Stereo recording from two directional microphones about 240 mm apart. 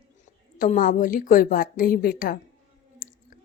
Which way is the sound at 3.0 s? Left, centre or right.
Left.